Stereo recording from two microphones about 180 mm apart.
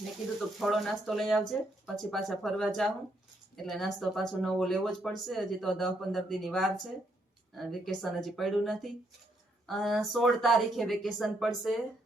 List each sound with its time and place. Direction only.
0.6 s speech: centre (ahead or behind)